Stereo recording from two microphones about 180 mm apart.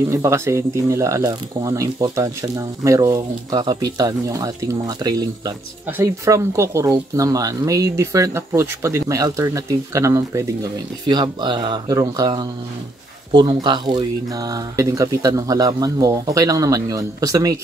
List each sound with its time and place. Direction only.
0.1 s speech: 15° right (ahead or behind)